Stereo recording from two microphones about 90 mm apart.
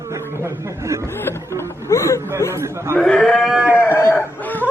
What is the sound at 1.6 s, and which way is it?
Speech, 30° left (ahead or behind).